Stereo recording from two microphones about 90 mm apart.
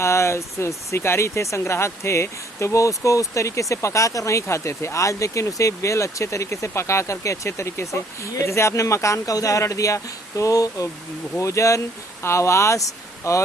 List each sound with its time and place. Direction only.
0.0 s speech: 30° left (ahead or behind)